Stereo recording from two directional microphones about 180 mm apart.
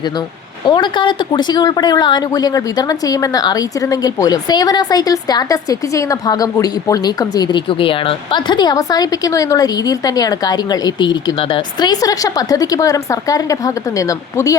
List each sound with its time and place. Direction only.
0.6 s a woman's voice: 25° left (ahead or behind)